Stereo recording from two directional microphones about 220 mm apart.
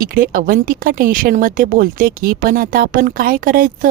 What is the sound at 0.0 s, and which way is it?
Speech, 40° right (ahead or behind).